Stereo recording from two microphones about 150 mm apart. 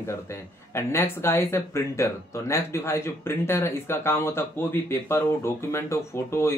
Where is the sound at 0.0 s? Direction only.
15° left (ahead or behind).